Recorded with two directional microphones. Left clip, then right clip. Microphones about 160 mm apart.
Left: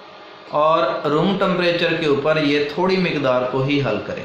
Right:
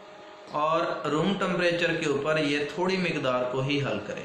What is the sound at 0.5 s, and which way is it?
A man's voice, 30° left (ahead or behind).